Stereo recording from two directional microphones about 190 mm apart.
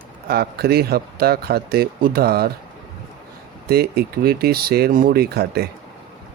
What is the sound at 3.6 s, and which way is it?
Speech, 55° right (ahead or behind).